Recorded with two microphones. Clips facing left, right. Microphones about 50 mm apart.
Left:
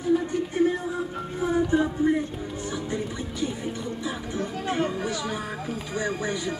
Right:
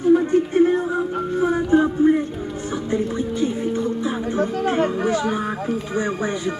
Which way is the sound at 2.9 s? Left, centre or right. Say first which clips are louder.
Right 8 dB; right.